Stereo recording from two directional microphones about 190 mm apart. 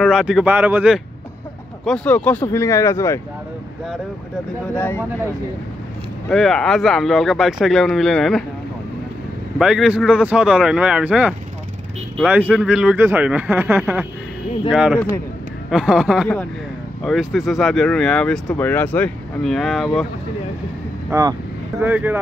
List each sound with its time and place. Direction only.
0.0 s speech: centre (ahead or behind)
1.9 s speech: 10° left (ahead or behind)
4.7 s speech: 10° left (ahead or behind)
6.2 s speech: 5° left (ahead or behind)
9.6 s speech: 5° right (ahead or behind)
21.1 s speech: 20° right (ahead or behind)